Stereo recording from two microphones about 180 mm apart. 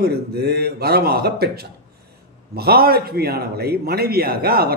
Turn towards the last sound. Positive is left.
turn(degrees=-60)  # may be behind; listen again after turning